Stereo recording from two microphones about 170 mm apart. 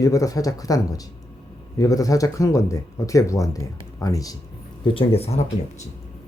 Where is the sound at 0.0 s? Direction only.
20° left (ahead or behind).